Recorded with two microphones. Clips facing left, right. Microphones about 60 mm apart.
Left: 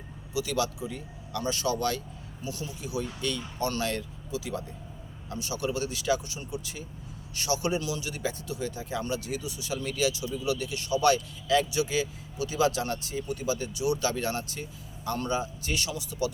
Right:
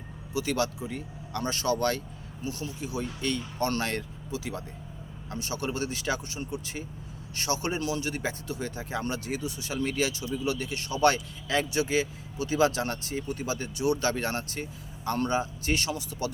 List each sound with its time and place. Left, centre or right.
0.3 s speech: right